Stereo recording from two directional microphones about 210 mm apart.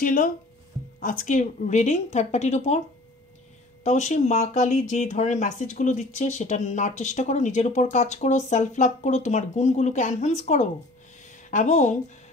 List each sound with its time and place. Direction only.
0.0 s speech: 40° left (ahead or behind)
3.8 s speech: 35° left (ahead or behind)